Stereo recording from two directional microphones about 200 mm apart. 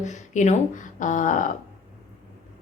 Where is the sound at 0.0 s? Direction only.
35° left (ahead or behind).